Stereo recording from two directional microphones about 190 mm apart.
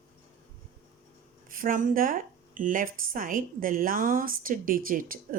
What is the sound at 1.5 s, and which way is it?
Speech, 45° right (ahead or behind).